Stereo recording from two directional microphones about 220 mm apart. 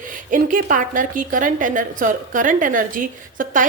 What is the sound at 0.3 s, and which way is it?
Speech, 40° right (ahead or behind).